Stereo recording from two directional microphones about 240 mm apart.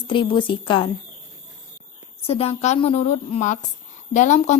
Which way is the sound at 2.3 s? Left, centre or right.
Left.